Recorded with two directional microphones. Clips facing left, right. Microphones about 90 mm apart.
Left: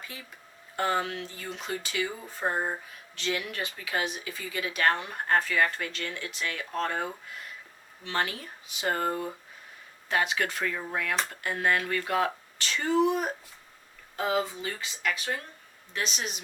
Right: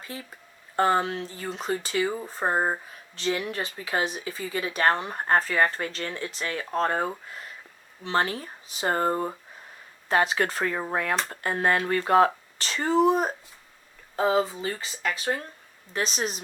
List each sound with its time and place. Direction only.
0.1 s speech: 35° right (ahead or behind)